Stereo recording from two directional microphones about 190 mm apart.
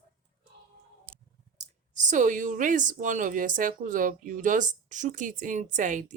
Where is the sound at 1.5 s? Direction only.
40° right (ahead or behind).